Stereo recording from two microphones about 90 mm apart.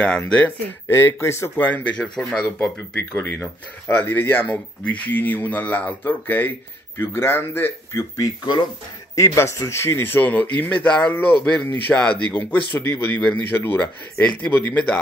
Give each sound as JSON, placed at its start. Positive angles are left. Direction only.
{"t": 0.3, "sound": "speech", "side_deg": 15}
{"t": 0.9, "sound": "speech", "side_deg": 30}
{"t": 1.6, "sound": "speech", "side_deg": 15}
{"t": 3.1, "sound": "speech", "side_deg": 25}
{"t": 8.2, "sound": "speech", "side_deg": 50}
{"t": 9.1, "sound": "speech", "side_deg": 35}